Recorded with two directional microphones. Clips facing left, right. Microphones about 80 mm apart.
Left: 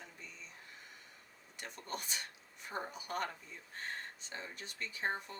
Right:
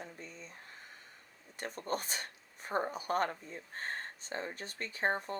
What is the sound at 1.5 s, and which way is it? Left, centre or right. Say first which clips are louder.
Speech: right 7 dB; right.